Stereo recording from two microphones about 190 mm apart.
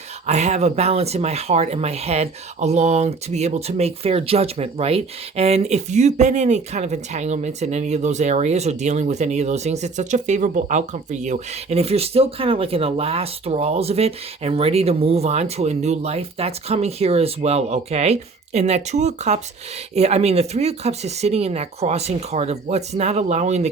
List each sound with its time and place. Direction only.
0.3 s speech: 35° right (ahead or behind)